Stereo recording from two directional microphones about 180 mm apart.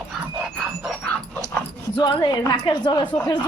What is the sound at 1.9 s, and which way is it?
A woman's voice, 25° left (ahead or behind).